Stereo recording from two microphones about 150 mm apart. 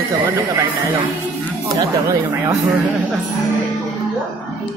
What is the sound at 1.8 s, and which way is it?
Speech, 25° right (ahead or behind).